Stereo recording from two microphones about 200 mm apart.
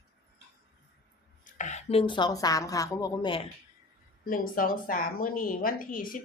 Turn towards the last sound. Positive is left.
turn(degrees=45)  # may be behind; listen again after turning